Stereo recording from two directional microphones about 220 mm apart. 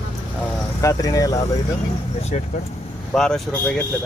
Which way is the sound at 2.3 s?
30° left (ahead or behind).